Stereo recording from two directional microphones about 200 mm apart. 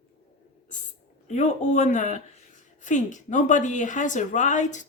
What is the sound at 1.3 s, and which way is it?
Speech, 35° left (ahead or behind).